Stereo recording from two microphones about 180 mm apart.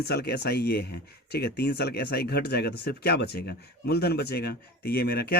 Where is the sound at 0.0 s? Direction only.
60° left (ahead or behind).